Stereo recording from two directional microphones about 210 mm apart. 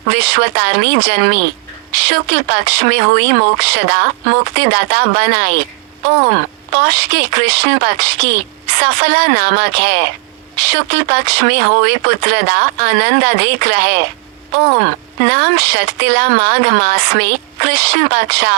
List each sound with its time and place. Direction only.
0.1 s speech: 50° right (ahead or behind)
6.7 s speech: 50° right (ahead or behind)
15.3 s speech: 50° right (ahead or behind)